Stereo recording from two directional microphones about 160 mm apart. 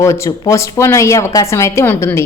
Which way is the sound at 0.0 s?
20° left (ahead or behind).